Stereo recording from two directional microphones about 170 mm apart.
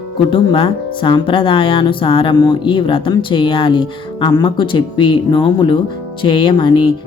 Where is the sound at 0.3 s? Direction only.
30° left (ahead or behind).